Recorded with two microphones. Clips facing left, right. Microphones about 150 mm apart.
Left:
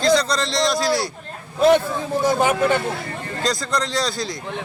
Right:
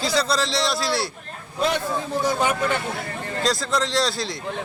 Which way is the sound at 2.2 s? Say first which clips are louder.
Left 5 dB; 45° left (ahead or behind).